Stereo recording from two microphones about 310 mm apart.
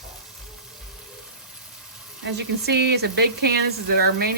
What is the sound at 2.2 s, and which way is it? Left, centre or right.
Speech, right.